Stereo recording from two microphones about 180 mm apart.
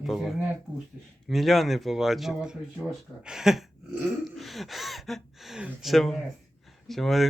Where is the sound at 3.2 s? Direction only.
5° right (ahead or behind).